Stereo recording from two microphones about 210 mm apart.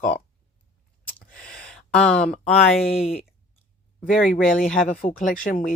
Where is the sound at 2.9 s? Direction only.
30° left (ahead or behind).